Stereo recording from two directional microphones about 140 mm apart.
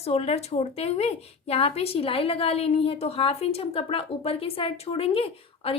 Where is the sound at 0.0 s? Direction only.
45° left (ahead or behind).